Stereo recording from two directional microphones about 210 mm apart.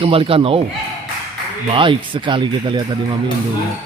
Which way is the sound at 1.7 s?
25° right (ahead or behind).